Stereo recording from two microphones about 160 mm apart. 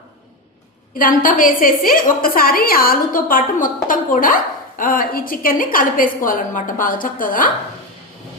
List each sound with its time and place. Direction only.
0.9 s a woman's voice: 60° left (ahead or behind)